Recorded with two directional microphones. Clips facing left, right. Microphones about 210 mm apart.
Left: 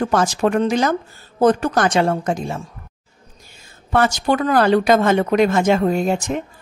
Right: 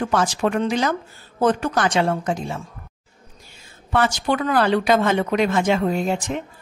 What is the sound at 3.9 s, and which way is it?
A woman's voice, 45° left (ahead or behind).